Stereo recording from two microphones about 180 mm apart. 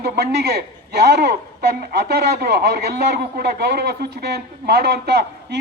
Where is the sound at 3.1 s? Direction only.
65° right (ahead or behind).